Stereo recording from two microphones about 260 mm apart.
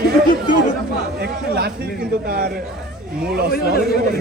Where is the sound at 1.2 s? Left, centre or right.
Right.